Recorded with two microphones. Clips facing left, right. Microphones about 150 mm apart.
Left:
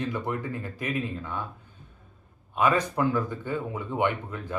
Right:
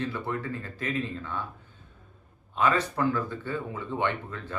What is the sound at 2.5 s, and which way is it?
Speech, 15° left (ahead or behind).